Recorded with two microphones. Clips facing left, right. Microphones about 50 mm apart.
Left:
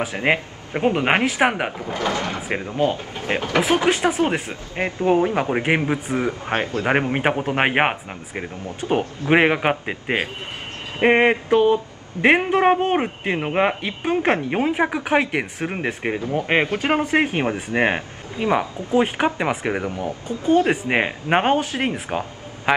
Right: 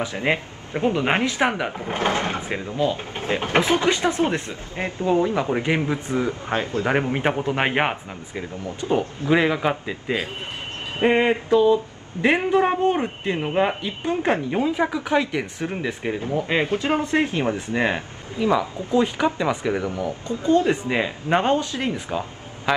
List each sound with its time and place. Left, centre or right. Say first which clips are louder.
0.0 s speech: left 2 dB; left
1.9 s speech: right 3 dB; right
2.5 s speech: left 4 dB; left
4.2 s speech: left 1 dB; left
8.4 s speech: even; left
22.7 s a man's voice: left 3 dB; left